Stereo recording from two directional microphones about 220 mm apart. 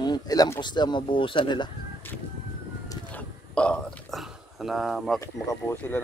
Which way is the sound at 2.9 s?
5° left (ahead or behind).